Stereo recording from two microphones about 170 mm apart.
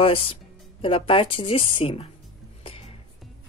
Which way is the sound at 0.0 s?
35° left (ahead or behind).